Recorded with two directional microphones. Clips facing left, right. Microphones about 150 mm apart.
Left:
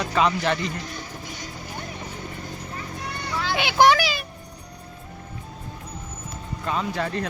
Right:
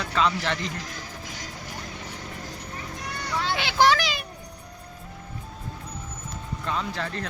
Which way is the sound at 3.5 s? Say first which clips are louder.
Left 4 dB; 15° left (ahead or behind).